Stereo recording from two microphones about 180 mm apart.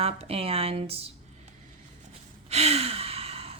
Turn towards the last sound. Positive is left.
turn(degrees=-35)  # may be behind; listen again after turning